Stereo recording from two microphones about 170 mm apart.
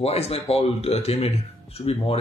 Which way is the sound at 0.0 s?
35° left (ahead or behind).